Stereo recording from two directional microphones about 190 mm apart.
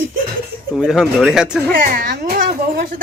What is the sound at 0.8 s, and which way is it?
Speech, 5° right (ahead or behind).